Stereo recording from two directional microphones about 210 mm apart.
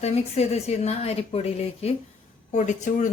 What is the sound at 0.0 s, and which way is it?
A woman's voice, 30° left (ahead or behind).